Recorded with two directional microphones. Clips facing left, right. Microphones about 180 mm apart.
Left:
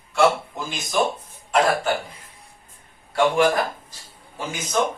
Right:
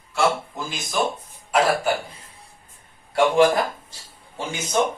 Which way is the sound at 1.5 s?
10° right (ahead or behind).